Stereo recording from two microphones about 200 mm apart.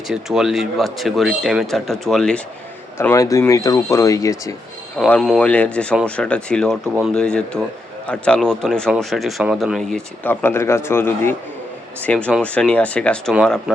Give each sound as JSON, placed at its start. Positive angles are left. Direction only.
{"t": 0.1, "sound": "speech", "side_deg": -5}
{"t": 3.0, "sound": "speech", "side_deg": 15}
{"t": 4.9, "sound": "speech", "side_deg": 5}
{"t": 10.2, "sound": "speech", "side_deg": 10}